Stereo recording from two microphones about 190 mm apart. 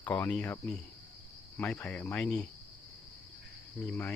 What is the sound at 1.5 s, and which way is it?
Cricket, 10° left (ahead or behind).